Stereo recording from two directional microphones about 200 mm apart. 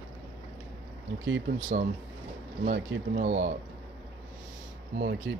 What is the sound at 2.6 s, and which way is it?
Speech, 45° right (ahead or behind).